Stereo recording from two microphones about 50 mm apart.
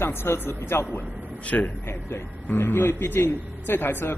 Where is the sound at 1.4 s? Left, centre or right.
Left.